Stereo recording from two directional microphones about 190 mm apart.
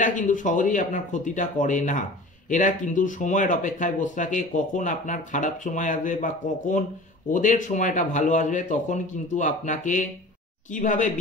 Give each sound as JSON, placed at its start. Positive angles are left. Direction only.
{"t": 0.0, "sound": "speech", "side_deg": 40}